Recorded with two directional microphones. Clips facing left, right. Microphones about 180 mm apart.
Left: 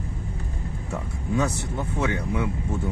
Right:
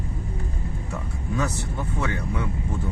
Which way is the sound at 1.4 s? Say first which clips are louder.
Left 2 dB; 15° left (ahead or behind).